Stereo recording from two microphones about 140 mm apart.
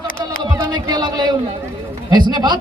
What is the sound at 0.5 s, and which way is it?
A man's voice, 30° right (ahead or behind).